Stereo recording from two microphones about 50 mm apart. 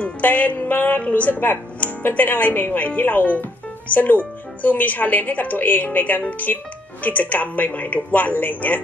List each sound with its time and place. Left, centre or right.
0.0 s speech: left
1.0 s speech: left